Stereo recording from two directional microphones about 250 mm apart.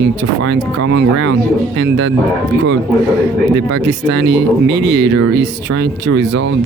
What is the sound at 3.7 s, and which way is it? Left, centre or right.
Speech, right.